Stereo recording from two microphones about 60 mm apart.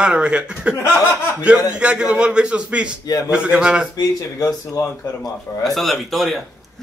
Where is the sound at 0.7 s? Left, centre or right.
Left.